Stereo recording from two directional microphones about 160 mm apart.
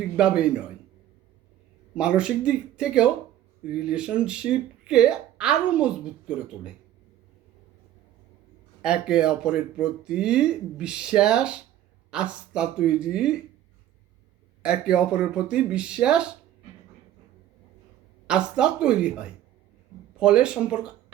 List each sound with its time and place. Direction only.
0.2 s speech: 5° right (ahead or behind)
2.0 s speech: 5° right (ahead or behind)
8.8 s speech: 5° right (ahead or behind)
14.6 s speech: 5° right (ahead or behind)
18.3 s speech: 5° right (ahead or behind)